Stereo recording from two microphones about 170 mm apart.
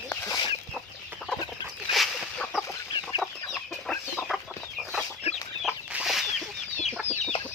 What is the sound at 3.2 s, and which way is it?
Chicken, centre (ahead or behind).